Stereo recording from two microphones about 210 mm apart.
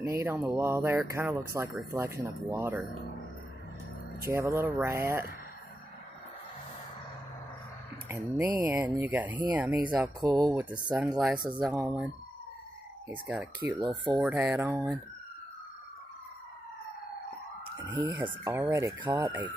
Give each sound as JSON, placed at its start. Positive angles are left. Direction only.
{"t": 0.1, "sound": "speech", "side_deg": -15}
{"t": 4.3, "sound": "speech", "side_deg": -15}
{"t": 8.1, "sound": "speech", "side_deg": -10}
{"t": 11.4, "sound": "music", "side_deg": -5}
{"t": 13.1, "sound": "music", "side_deg": -5}
{"t": 13.7, "sound": "speech", "side_deg": -20}
{"t": 14.2, "sound": "music", "side_deg": -5}
{"t": 18.5, "sound": "speech", "side_deg": -10}